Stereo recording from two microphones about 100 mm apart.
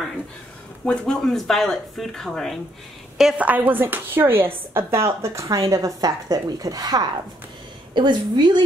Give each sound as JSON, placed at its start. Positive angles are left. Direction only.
{"t": 0.8, "sound": "speech", "side_deg": 5}
{"t": 3.3, "sound": "a woman's voice", "side_deg": -15}